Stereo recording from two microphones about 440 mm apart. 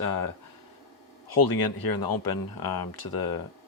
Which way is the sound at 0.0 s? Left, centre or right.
Left.